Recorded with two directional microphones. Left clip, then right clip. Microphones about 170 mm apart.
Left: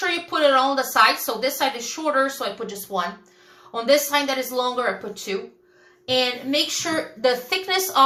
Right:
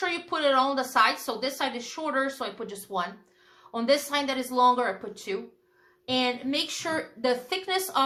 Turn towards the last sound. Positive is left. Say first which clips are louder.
# left 6 dB
turn(degrees=-35)  # may be behind; listen again after turning